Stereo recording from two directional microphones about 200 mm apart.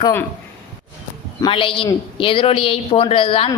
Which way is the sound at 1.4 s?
25° left (ahead or behind).